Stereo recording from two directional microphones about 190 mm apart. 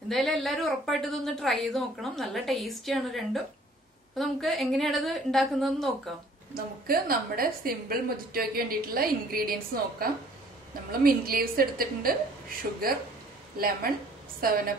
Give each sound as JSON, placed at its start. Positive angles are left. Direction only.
{"t": 0.1, "sound": "a woman's voice", "side_deg": 0}
{"t": 6.5, "sound": "a woman's voice", "side_deg": -50}